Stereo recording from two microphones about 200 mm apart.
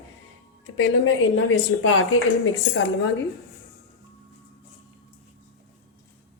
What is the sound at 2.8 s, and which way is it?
Speech, 70° left (ahead or behind).